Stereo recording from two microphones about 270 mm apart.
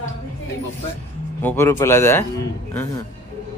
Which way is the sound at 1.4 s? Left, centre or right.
Centre.